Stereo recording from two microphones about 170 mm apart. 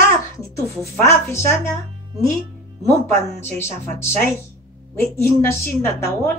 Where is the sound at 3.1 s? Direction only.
15° left (ahead or behind).